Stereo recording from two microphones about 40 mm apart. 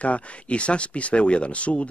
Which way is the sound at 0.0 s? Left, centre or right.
Left.